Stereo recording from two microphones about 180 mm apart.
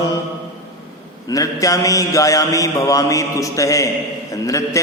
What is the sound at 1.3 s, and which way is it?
Mantra, 20° left (ahead or behind).